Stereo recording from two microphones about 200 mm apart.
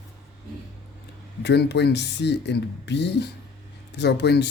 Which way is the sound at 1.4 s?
55° left (ahead or behind).